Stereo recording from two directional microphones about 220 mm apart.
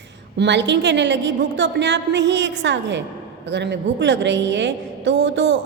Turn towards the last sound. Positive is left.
turn(degrees=-55)  # may be behind; listen again after turning